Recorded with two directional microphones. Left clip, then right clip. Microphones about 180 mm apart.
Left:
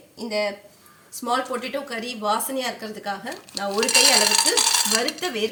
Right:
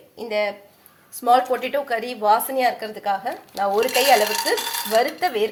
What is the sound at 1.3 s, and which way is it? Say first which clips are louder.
A woman's voice: right 7 dB; 20° right (ahead or behind).